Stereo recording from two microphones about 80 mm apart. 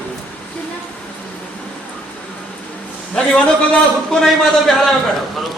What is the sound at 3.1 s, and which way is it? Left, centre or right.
A man's voice, centre.